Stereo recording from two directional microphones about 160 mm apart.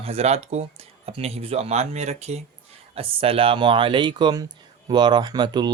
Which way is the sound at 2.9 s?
35° right (ahead or behind).